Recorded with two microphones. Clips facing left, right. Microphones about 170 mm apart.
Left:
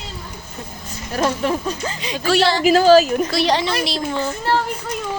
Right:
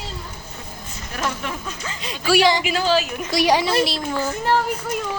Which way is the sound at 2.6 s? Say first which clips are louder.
Left 9 dB; 40° left (ahead or behind).